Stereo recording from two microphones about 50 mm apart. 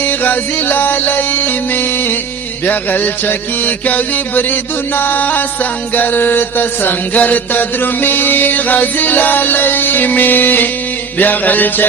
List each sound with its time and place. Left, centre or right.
0.0 s music: left